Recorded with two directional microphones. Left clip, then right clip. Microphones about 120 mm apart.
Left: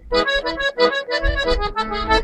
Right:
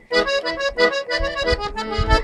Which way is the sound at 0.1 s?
50° right (ahead or behind).